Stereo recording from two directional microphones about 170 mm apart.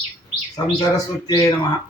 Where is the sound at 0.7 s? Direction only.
20° left (ahead or behind).